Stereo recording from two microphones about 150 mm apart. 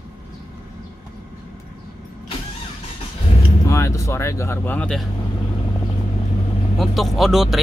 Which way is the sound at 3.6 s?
20° left (ahead or behind).